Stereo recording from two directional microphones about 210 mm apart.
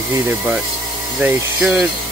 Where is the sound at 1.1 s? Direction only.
5° right (ahead or behind).